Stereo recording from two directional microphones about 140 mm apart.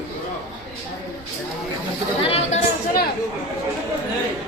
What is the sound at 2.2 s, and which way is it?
Speech, 40° left (ahead or behind).